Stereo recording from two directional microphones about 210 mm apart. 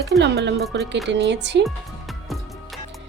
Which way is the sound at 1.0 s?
55° right (ahead or behind).